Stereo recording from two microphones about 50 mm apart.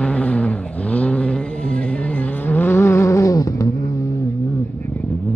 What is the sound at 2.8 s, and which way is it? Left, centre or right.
Vehicle, left.